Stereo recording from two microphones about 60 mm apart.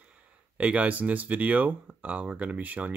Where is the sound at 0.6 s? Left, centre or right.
Right.